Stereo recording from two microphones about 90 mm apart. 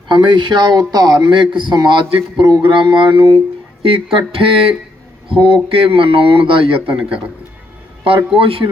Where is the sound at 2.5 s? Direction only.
60° right (ahead or behind); by 3.4 s 75° right (ahead or behind).